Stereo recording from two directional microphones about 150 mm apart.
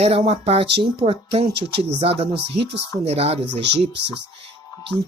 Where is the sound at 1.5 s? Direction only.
90° right.